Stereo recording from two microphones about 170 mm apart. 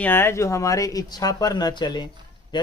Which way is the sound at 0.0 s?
15° left (ahead or behind).